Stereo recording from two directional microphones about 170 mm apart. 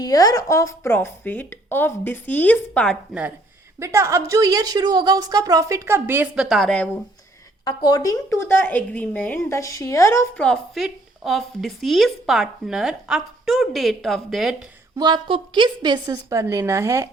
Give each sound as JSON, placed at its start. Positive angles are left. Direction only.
{"t": 0.0, "sound": "speech", "side_deg": 20}
{"t": 3.8, "sound": "a woman's voice", "side_deg": -15}
{"t": 7.6, "sound": "a woman's voice", "side_deg": 25}
{"t": 14.9, "sound": "a woman's voice", "side_deg": -25}